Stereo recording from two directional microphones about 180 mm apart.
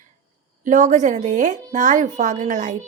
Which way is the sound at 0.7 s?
45° right (ahead or behind).